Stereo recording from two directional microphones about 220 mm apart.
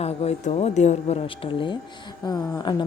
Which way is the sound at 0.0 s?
30° left (ahead or behind).